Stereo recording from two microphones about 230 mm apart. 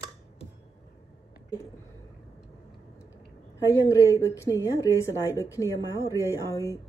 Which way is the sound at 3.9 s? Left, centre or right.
Centre.